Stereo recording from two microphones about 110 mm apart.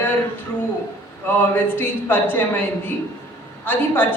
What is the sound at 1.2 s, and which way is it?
A woman's voice, 20° left (ahead or behind).